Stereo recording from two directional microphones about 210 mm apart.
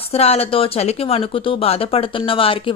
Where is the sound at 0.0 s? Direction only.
30° left (ahead or behind).